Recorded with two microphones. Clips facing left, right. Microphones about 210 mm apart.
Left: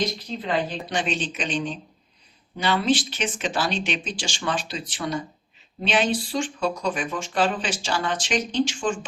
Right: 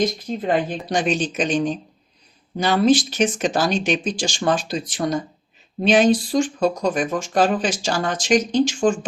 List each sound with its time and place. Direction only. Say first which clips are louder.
0.0 s speech: right 6 dB; 50° right (ahead or behind)